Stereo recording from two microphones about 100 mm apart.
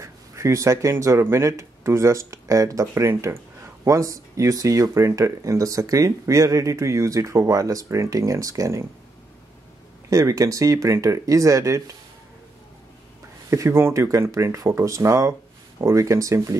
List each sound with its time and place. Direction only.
0.0 s speech: 30° right (ahead or behind)
10.0 s speech: 35° right (ahead or behind)
13.5 s speech: 30° right (ahead or behind)